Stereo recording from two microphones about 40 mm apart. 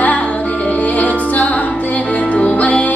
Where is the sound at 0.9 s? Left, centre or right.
Left.